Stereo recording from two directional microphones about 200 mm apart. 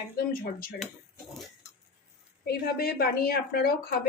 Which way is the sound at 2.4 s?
50° left (ahead or behind).